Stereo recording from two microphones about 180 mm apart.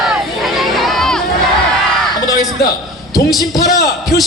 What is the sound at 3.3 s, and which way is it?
Speech, 20° left (ahead or behind).